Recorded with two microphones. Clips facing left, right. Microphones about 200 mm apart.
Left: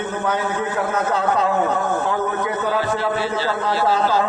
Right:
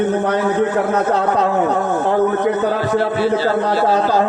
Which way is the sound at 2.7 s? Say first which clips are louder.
Right 4 dB; 50° right (ahead or behind).